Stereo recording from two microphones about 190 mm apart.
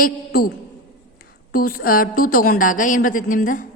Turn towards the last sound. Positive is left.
turn(degrees=45)  # may be behind; listen again after turning